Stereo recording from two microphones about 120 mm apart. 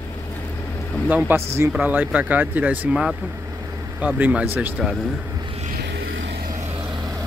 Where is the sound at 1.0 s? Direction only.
15° right (ahead or behind).